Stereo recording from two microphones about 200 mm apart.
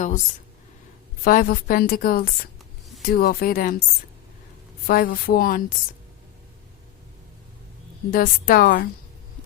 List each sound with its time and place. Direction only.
1.2 s a woman's voice: 45° left (ahead or behind)
4.9 s a woman's voice: 45° left (ahead or behind)
8.1 s a woman's voice: 45° left (ahead or behind)